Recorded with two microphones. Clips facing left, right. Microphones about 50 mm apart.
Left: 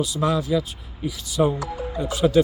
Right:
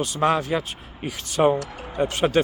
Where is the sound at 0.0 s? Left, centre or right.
Right.